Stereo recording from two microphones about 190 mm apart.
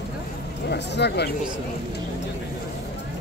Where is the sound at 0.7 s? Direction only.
60° left (ahead or behind).